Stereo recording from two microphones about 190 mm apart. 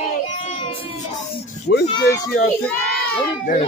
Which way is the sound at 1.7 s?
60° left (ahead or behind).